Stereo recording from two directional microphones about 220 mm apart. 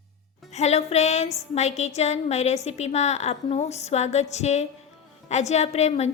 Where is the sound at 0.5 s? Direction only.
30° left (ahead or behind).